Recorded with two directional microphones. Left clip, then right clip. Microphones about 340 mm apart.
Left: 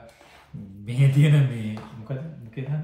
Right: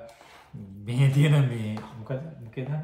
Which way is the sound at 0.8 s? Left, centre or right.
Centre.